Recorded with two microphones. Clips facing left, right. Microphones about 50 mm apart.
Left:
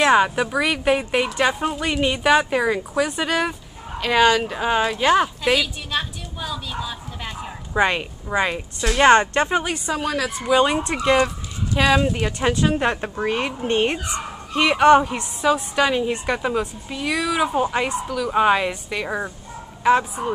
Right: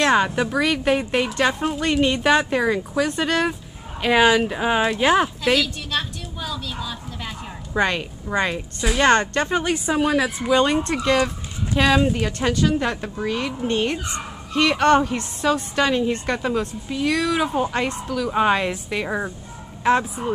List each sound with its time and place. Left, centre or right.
0.0 s a woman's voice: centre
4.0 s a sound: centre
8.3 s speech: centre
9.5 s a woman's voice: centre
9.8 s speech: centre
10.5 s speech: centre
11.2 s a woman's voice: centre; by 13.9 s left
14.5 s a woman's voice: centre